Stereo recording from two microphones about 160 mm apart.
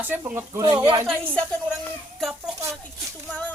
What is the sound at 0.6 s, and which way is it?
Speech, 25° right (ahead or behind).